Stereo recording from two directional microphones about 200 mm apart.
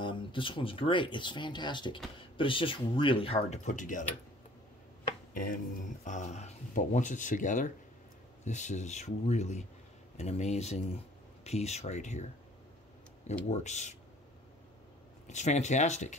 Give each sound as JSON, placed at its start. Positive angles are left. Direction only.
{"t": 0.0, "sound": "speech", "side_deg": 25}
{"t": 5.3, "sound": "speech", "side_deg": 40}
{"t": 13.5, "sound": "speech", "side_deg": 35}
{"t": 15.2, "sound": "speech", "side_deg": 35}